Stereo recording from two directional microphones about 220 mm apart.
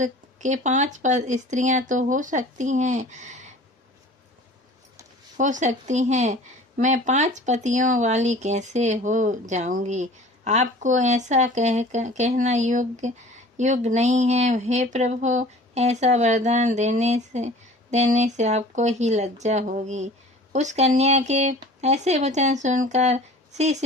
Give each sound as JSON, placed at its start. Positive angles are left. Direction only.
{"t": 0.0, "sound": "speech", "side_deg": -35}
{"t": 5.4, "sound": "speech", "side_deg": -35}